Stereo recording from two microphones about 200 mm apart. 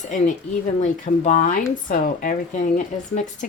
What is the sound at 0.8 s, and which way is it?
A woman's voice, 35° left (ahead or behind).